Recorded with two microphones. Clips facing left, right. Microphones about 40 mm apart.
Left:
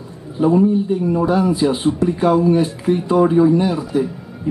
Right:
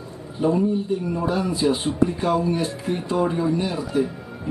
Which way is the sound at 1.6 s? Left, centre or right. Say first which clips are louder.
Left 4 dB; centre.